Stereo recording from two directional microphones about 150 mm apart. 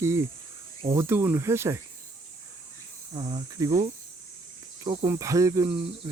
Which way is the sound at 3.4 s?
25° right (ahead or behind).